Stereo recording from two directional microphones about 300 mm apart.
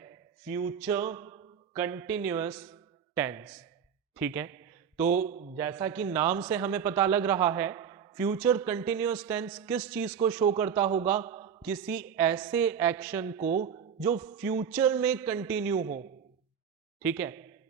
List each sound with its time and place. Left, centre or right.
0.4 s a man's voice: centre
5.2 s speech: right
5.5 s a man's voice: centre
13.4 s speech: right
14.2 s a man's voice: centre
17.0 s a man's voice: centre